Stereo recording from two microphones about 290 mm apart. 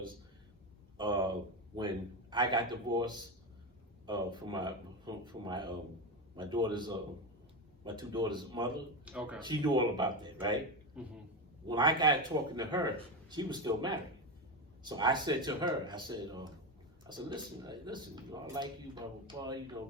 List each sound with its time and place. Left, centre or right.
0.9 s a sound: centre
2.3 s speech: centre
9.0 s speech: centre
9.4 s speech: centre
11.0 s speech: centre
11.6 s speech: centre